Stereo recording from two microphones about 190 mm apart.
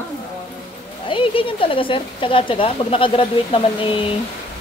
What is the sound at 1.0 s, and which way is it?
Speech, 25° left (ahead or behind).